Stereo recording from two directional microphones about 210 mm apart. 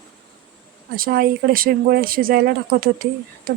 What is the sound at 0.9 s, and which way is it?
Speech, 45° right (ahead or behind).